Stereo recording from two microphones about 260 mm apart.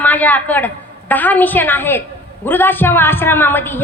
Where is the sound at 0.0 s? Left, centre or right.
Centre.